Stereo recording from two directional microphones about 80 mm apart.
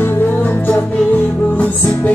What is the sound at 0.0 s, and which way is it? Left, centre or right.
Music, left.